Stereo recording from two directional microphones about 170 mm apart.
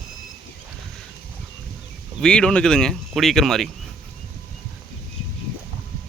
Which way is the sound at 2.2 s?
5° left (ahead or behind).